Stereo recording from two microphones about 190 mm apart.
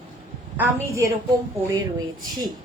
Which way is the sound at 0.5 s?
10° right (ahead or behind).